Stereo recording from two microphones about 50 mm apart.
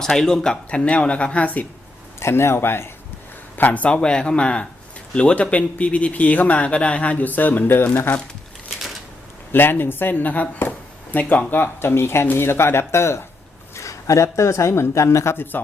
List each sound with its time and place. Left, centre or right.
0.0 s a man's voice: centre; by 1.6 s left
2.1 s speech: left
3.5 s a man's voice: left
3.8 s a man's voice: centre; by 7.9 s left
9.5 s speech: left
13.7 s speech: left